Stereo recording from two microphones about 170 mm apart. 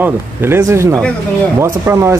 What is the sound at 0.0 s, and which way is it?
Speech, 15° right (ahead or behind).